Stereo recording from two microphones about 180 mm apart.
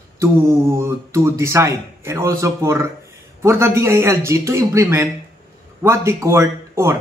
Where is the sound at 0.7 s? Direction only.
15° right (ahead or behind).